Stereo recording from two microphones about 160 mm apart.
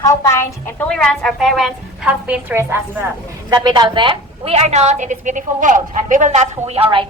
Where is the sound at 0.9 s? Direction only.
5° left (ahead or behind); by 6.8 s 45° right (ahead or behind).